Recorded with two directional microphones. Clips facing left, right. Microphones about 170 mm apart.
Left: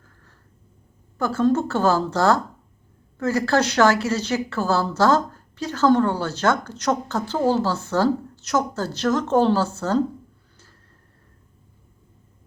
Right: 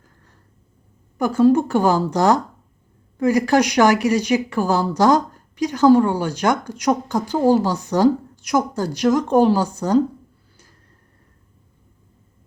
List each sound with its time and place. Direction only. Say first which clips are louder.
1.2 s a woman's voice: right 5 dB; 15° right (ahead or behind)